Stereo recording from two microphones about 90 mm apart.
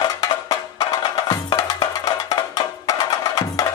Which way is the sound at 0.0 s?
45° left (ahead or behind).